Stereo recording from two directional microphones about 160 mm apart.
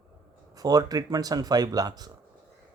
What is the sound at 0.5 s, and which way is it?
Speech, 25° right (ahead or behind).